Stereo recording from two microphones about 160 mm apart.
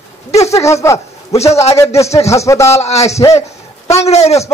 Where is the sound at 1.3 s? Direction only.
40° left (ahead or behind).